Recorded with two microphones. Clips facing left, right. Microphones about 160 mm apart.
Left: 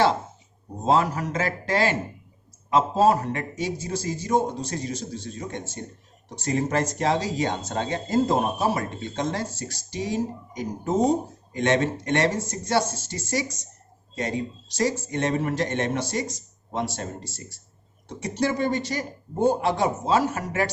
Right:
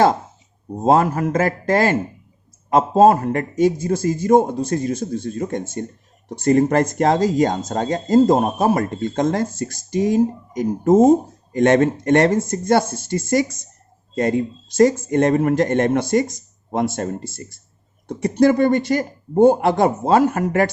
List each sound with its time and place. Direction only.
0.9 s speech: 50° right (ahead or behind)